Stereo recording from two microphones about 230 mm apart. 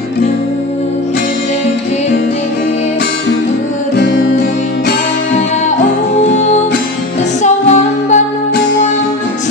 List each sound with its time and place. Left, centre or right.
7.4 s music: left